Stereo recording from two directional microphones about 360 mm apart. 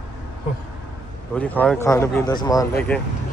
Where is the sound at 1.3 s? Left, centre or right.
Centre.